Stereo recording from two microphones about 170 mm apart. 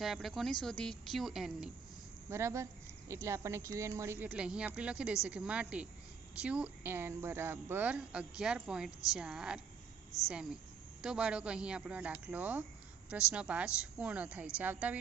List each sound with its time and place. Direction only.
0.0 s a woman's voice: centre (ahead or behind)
2.3 s a woman's voice: 15° right (ahead or behind)